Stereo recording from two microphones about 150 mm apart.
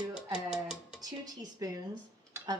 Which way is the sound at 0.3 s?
5° right (ahead or behind).